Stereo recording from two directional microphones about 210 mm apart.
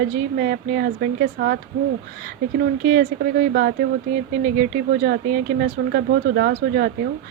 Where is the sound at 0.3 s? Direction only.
45° right (ahead or behind).